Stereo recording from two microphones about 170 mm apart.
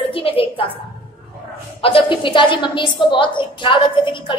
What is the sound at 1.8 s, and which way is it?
A woman's voice, 30° left (ahead or behind).